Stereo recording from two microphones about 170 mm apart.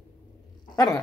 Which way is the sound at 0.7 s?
20° left (ahead or behind).